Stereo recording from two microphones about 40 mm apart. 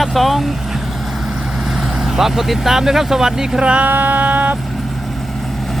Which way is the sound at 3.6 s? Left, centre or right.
Right.